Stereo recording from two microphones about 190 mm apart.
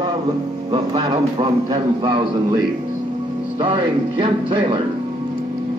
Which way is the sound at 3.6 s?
25° right (ahead or behind).